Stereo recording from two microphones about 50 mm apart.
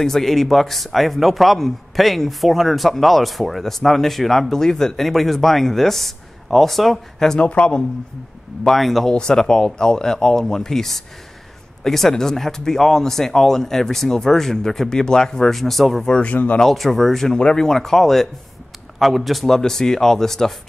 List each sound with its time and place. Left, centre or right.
0.0 s a man's voice: centre
7.3 s speech: left
8.6 s a man's voice: centre
9.1 s speech: centre
16.1 s speech: left
16.6 s a man's voice: centre